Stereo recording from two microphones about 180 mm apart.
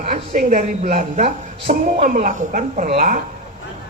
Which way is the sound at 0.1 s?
35° right (ahead or behind).